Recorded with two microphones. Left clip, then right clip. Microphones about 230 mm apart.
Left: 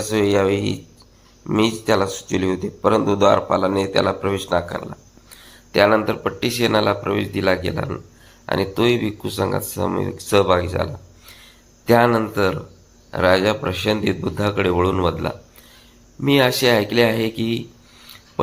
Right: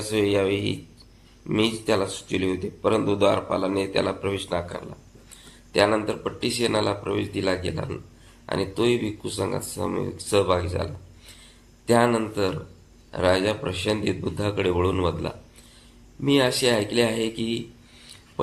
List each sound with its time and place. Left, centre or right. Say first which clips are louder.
0.0 s speech: left 5 dB; centre
11.9 s speech: left 5 dB; centre